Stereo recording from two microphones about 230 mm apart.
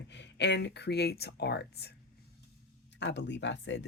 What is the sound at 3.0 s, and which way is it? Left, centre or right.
Speech, left.